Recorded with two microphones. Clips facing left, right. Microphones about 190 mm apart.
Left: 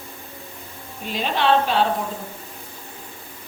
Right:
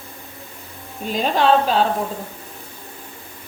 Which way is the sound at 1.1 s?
40° right (ahead or behind).